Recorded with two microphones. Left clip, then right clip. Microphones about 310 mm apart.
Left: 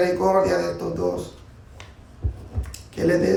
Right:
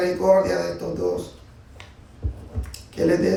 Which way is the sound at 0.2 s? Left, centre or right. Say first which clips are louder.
Right 2 dB; centre.